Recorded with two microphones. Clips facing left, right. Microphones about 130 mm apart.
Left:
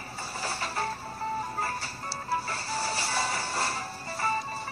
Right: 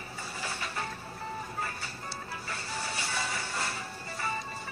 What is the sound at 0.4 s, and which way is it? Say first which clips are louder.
Music: left 5 dB; 35° left (ahead or behind).